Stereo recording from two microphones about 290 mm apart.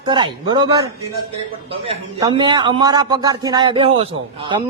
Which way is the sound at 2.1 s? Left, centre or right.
Centre.